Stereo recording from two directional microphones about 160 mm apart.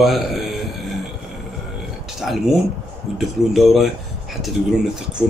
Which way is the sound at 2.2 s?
Centre (ahead or behind).